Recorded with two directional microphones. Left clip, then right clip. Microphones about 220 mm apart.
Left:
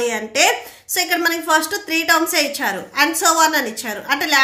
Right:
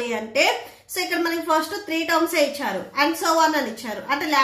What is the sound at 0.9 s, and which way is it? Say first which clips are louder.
A woman's voice: left 5 dB; 35° left (ahead or behind).